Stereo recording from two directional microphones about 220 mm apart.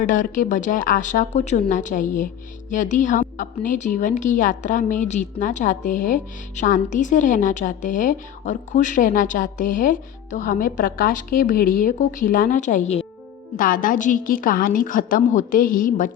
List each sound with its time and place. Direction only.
0.0 s a woman's voice: 35° left (ahead or behind)